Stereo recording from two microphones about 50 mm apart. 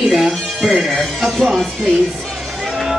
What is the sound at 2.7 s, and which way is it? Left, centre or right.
Music, centre.